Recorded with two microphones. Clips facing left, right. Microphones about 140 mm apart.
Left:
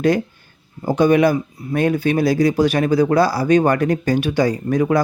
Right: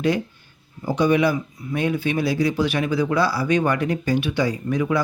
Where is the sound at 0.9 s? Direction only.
50° left (ahead or behind).